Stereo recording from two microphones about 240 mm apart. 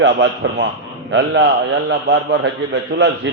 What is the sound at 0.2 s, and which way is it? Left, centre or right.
A man's voice, right.